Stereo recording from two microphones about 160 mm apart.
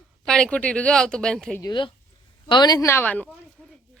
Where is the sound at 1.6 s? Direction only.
30° left (ahead or behind); by 3.3 s 10° left (ahead or behind).